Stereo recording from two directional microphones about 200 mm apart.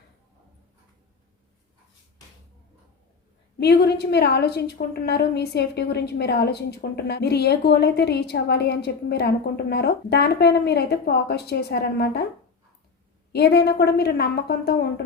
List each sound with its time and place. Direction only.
3.6 s a woman's voice: 55° left (ahead or behind)
13.3 s a woman's voice: 55° left (ahead or behind)